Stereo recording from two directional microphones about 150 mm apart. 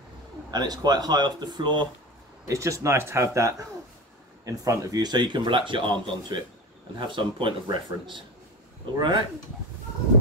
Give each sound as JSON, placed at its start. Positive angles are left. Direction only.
{"t": 0.5, "sound": "speech", "side_deg": -25}